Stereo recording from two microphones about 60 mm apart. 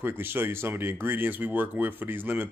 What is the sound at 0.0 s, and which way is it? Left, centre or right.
Speech, right.